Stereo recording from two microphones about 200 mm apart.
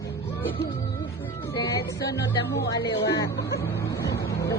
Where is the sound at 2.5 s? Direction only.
60° left (ahead or behind).